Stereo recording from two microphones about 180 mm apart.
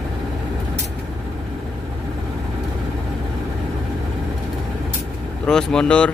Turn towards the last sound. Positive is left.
turn(degrees=5)  # may be behind; listen again after turning